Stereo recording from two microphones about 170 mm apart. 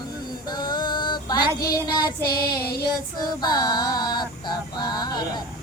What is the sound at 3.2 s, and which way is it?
Female singing, 25° left (ahead or behind).